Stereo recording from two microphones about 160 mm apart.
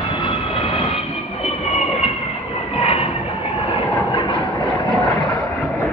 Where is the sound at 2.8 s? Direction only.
40° left (ahead or behind).